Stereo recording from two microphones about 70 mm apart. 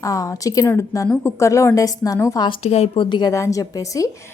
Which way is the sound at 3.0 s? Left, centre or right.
Left.